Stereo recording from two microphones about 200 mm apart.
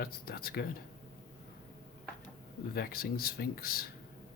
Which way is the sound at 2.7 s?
50° left (ahead or behind).